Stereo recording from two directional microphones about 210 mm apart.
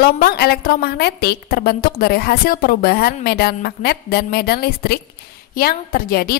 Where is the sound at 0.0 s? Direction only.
50° left (ahead or behind).